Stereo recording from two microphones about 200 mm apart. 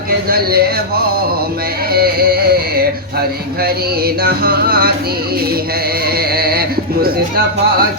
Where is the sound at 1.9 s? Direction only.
50° right (ahead or behind).